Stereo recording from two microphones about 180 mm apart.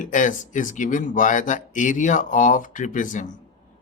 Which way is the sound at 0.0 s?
45° left (ahead or behind).